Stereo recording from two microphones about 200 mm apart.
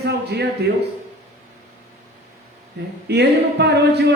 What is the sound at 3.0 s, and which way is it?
Speech, 55° right (ahead or behind).